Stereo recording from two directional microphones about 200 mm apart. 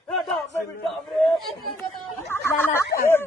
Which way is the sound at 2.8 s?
50° left (ahead or behind).